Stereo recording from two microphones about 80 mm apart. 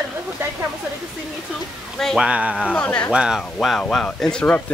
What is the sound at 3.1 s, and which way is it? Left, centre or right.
Speech, centre.